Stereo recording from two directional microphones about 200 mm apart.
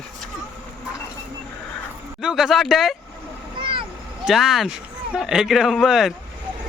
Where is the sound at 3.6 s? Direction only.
25° right (ahead or behind).